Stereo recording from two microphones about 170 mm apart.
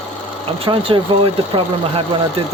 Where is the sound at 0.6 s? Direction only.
30° right (ahead or behind).